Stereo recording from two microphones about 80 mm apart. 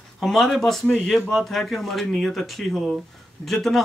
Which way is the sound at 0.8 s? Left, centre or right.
Centre.